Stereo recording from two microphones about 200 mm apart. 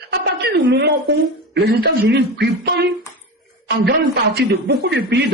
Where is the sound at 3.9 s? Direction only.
55° right (ahead or behind).